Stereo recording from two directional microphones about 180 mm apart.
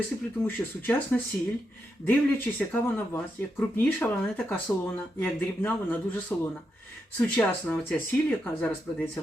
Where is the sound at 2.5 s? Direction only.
10° left (ahead or behind).